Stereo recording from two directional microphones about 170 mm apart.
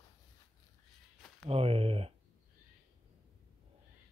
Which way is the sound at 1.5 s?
35° right (ahead or behind).